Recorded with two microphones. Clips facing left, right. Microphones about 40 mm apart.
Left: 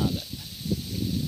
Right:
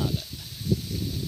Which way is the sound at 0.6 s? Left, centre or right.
Left.